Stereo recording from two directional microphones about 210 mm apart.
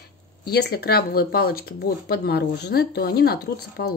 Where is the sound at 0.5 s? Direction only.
50° left (ahead or behind).